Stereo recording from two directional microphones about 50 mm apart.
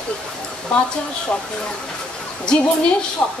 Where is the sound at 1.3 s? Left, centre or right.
Left.